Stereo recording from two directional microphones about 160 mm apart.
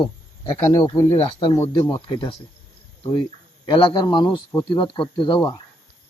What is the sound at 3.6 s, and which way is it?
A man's voice, 30° left (ahead or behind).